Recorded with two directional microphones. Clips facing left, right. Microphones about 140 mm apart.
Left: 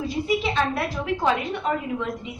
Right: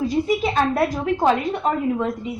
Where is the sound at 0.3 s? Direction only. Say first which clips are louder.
Right 3 dB; 45° right (ahead or behind).